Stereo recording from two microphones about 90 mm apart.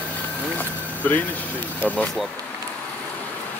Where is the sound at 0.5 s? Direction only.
20° left (ahead or behind).